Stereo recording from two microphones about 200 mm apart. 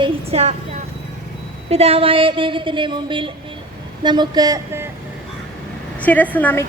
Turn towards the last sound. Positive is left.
turn(degrees=10)  # may be behind; listen again after turning